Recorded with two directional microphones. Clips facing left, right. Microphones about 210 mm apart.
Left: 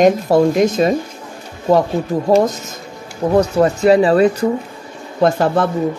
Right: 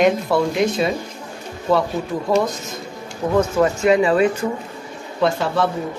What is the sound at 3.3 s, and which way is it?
Speech, 35° left (ahead or behind).